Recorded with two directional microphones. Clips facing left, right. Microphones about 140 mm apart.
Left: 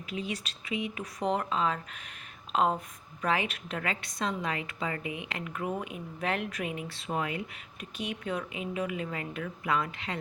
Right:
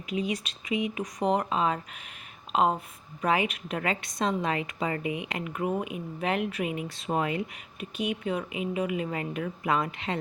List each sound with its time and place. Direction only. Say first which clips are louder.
0.6 s a woman's voice: right 5 dB; 20° right (ahead or behind)
8.0 s speech: right 4 dB; 10° right (ahead or behind)
9.0 s a woman's voice: right 4 dB; 25° right (ahead or behind)